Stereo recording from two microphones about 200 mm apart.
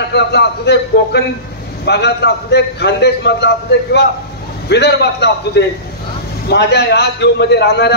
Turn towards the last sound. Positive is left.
turn(degrees=55)  # may be behind; listen again after turning